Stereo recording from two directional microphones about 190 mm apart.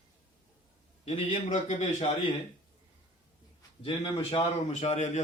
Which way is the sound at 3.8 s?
30° left (ahead or behind).